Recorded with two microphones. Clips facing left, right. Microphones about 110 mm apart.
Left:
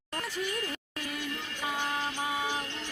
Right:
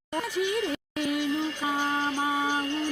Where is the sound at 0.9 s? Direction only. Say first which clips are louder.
Right 11 dB; 90° right.